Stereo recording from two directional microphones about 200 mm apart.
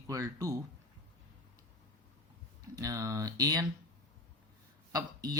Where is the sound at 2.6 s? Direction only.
15° right (ahead or behind).